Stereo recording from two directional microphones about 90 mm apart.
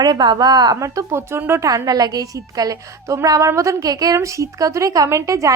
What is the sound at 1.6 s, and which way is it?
A woman's voice, 40° right (ahead or behind).